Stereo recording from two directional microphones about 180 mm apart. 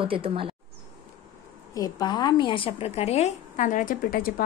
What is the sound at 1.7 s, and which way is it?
A woman's voice, 20° left (ahead or behind).